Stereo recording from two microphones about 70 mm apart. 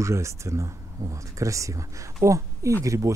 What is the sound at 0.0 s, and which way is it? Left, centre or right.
Speech, right.